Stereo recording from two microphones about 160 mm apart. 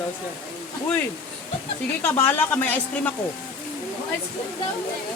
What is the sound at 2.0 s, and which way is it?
Speech, 10° left (ahead or behind).